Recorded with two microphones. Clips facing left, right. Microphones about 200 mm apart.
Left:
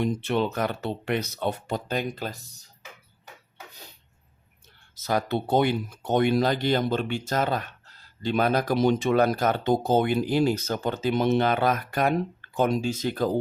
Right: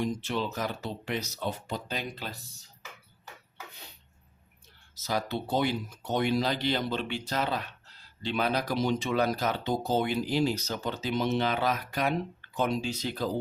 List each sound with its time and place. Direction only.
0.0 s speech: 60° left (ahead or behind)
5.0 s speech: 55° left (ahead or behind)